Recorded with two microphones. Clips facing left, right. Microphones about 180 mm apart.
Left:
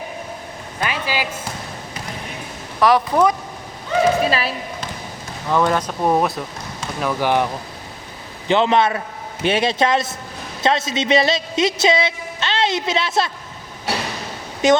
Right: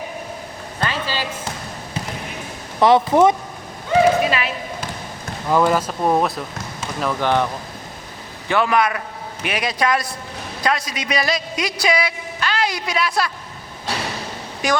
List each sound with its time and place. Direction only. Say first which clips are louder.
0.8 s a sound: left 1 dB; 15° left (ahead or behind)
2.8 s speech: right 2 dB; 25° right (ahead or behind)
4.3 s a woman's voice: left 1 dB; 35° left (ahead or behind)
5.5 s speech: right 1 dB; 5° right (ahead or behind); by 7.4 s 10° left (ahead or behind)
8.4 s a man's voice: left 2 dB; 25° left (ahead or behind)
14.6 s a man's voice: left 6 dB; 25° left (ahead or behind)